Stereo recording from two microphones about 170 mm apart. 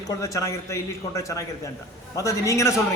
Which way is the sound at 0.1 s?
20° left (ahead or behind).